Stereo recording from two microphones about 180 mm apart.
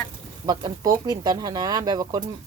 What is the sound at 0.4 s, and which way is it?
Speech, 20° right (ahead or behind).